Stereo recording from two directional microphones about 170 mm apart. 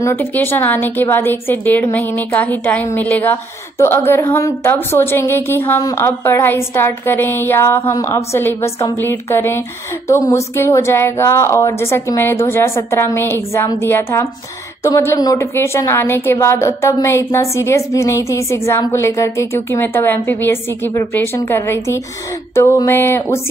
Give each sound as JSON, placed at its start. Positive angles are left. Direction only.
{"t": 0.0, "sound": "a woman's voice", "side_deg": 10}